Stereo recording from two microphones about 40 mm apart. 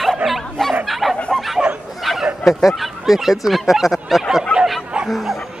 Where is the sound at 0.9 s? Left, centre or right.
Centre.